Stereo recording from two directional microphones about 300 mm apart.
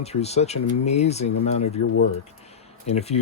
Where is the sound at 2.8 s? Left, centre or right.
Left.